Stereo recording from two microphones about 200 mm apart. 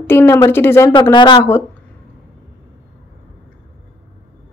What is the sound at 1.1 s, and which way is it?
Speech, 20° left (ahead or behind).